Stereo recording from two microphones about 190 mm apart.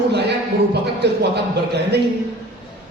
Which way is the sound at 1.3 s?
60° right (ahead or behind).